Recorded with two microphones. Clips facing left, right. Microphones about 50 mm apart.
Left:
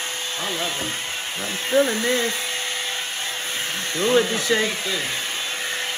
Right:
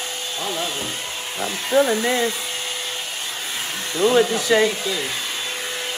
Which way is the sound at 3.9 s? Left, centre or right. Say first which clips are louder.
Right 3 dB; left.